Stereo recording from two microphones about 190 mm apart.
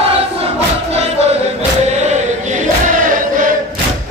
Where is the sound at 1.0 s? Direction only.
35° right (ahead or behind).